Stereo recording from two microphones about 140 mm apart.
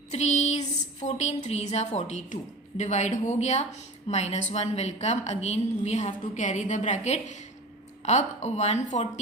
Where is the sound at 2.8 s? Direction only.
55° left (ahead or behind).